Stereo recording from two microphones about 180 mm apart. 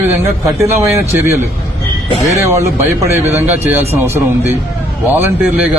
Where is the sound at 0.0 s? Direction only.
15° right (ahead or behind).